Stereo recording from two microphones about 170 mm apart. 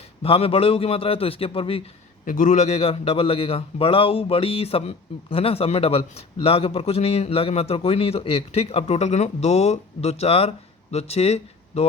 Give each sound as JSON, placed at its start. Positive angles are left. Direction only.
{"t": 0.2, "sound": "a man's voice", "side_deg": 35}
{"t": 2.2, "sound": "a man's voice", "side_deg": 50}